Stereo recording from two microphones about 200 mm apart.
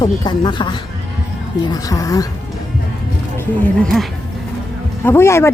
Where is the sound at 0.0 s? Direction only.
20° left (ahead or behind).